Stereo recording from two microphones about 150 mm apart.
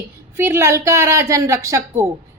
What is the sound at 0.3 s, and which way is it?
A woman's voice, 15° right (ahead or behind).